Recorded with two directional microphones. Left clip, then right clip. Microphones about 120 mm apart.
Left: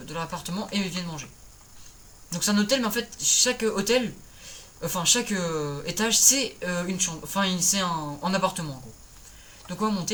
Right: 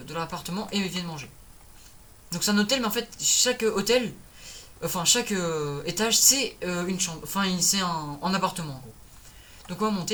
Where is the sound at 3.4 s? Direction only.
45° right (ahead or behind).